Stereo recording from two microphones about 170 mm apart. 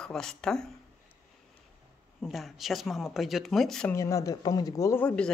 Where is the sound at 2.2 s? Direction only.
Centre (ahead or behind).